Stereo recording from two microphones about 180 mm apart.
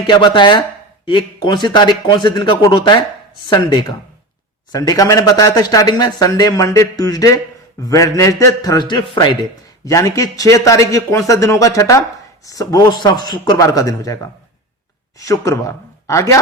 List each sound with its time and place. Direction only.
0.1 s a man's voice: 25° left (ahead or behind)
15.2 s speech: 20° left (ahead or behind)